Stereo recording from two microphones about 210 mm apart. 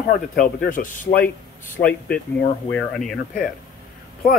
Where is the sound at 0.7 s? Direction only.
40° left (ahead or behind).